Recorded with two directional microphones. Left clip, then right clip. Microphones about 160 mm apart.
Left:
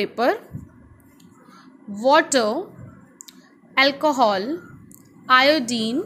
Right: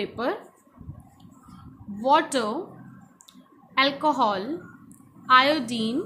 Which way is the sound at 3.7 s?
30° left (ahead or behind).